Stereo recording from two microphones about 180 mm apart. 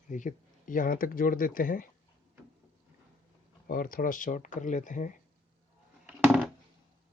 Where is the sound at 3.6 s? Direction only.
55° left (ahead or behind).